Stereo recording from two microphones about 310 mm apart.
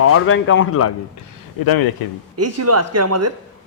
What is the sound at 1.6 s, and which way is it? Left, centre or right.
Speech, left.